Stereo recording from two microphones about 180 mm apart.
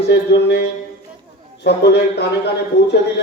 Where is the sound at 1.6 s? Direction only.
70° left (ahead or behind).